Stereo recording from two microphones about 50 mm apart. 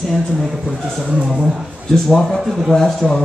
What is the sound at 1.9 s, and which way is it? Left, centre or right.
Speech, centre.